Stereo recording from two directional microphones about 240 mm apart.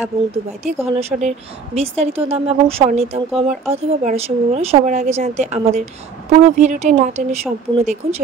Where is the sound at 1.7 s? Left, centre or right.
Right.